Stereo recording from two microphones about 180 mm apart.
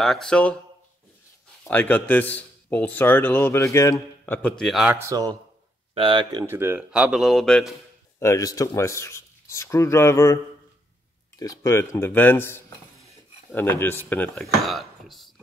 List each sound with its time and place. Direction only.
0.0 s speech: centre (ahead or behind)
1.7 s a man's voice: 10° left (ahead or behind)
5.0 s speech: 20° right (ahead or behind)
6.4 s speech: 10° right (ahead or behind)
8.2 s a man's voice: 15° left (ahead or behind); by 15.3 s centre (ahead or behind)